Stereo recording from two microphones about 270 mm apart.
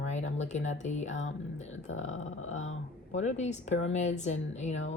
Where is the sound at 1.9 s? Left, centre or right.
Left.